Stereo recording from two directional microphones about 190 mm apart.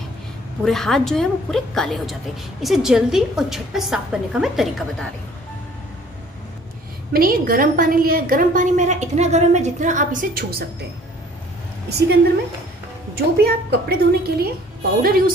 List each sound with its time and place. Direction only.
0.7 s a woman's voice: centre (ahead or behind)
7.1 s a woman's voice: 50° right (ahead or behind)
13.1 s a woman's voice: 55° right (ahead or behind)